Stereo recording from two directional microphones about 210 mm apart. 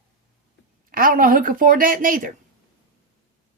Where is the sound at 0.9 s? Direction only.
40° right (ahead or behind).